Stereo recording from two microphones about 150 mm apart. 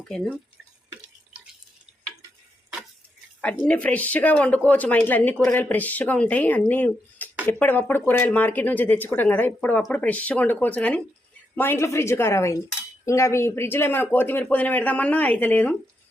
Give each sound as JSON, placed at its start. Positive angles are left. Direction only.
{"t": 0.1, "sound": "speech", "side_deg": 0}
{"t": 3.7, "sound": "speech", "side_deg": 10}